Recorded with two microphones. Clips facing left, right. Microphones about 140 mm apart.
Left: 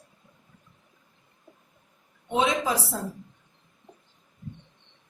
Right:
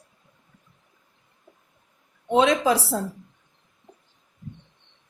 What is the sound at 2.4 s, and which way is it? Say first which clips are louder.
Speech: right 5 dB; 80° right.